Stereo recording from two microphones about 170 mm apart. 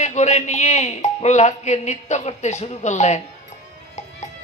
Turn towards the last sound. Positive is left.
turn(degrees=45)  # may be behind; listen again after turning